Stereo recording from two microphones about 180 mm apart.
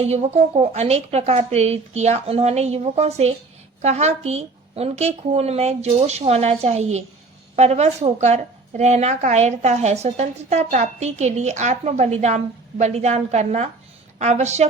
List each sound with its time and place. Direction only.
0.0 s a woman's voice: 35° right (ahead or behind)